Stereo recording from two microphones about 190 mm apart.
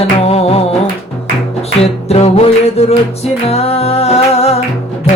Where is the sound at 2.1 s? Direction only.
35° left (ahead or behind).